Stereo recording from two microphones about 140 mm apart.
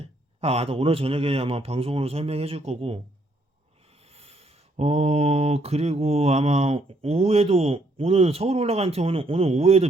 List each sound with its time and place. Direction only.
0.0 s mantra: 45° right (ahead or behind)
4.0 s mantra: 45° right (ahead or behind)